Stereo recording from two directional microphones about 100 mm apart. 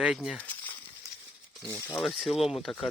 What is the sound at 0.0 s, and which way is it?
Speech, 5° right (ahead or behind).